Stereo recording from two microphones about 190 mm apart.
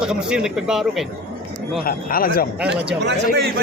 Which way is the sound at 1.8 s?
50° left (ahead or behind).